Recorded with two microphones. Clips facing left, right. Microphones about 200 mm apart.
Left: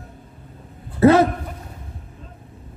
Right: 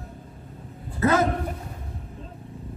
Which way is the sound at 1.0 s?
30° left (ahead or behind).